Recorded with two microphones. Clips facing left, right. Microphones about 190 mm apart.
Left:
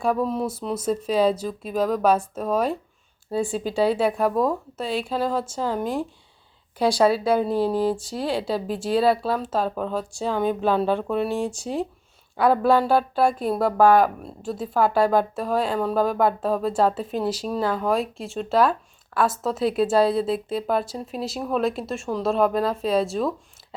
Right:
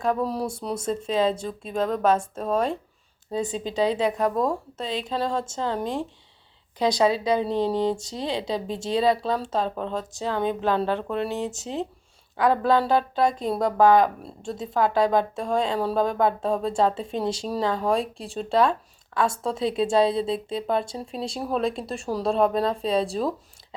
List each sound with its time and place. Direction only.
0.0 s a woman's voice: 5° left (ahead or behind)
11.3 s speech: 20° right (ahead or behind)
12.4 s a woman's voice: 10° left (ahead or behind)
17.2 s speech: 25° right (ahead or behind)
17.6 s speech: 5° left (ahead or behind)
19.6 s speech: 25° right (ahead or behind)
20.6 s speech: 5° left (ahead or behind)